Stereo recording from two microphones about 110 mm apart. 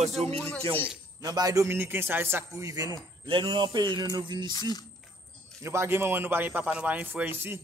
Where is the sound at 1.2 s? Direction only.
35° right (ahead or behind).